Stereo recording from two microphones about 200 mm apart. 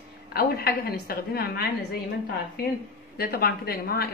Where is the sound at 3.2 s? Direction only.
50° left (ahead or behind).